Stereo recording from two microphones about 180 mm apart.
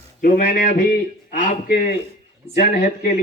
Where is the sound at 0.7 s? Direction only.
45° left (ahead or behind).